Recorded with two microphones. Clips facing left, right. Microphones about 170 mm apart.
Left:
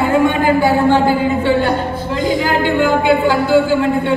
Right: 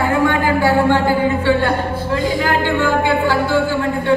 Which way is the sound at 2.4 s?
15° left (ahead or behind).